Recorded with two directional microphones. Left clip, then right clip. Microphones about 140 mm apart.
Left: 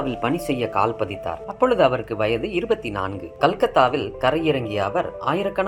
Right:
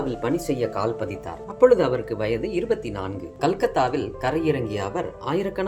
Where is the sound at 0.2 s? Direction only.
25° left (ahead or behind).